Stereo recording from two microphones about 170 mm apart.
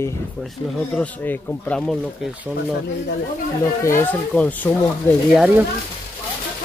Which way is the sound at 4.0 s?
10° left (ahead or behind).